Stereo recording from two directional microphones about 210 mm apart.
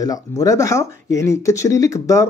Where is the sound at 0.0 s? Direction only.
15° left (ahead or behind).